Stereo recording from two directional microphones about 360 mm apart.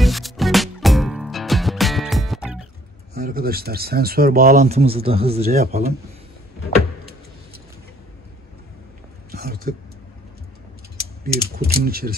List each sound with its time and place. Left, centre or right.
0.0 s music: centre
3.2 s speech: right
9.3 s a sound: right
11.5 s speech: right